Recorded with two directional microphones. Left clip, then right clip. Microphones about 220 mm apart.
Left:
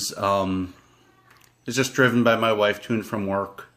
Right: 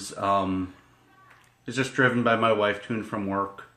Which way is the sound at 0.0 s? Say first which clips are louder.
Left 2 dB; 50° left (ahead or behind).